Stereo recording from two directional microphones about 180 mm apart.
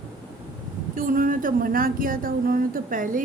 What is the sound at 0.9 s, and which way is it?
Speech, 50° right (ahead or behind).